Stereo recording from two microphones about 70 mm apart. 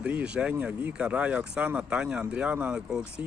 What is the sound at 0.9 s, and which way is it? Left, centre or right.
Speech, centre.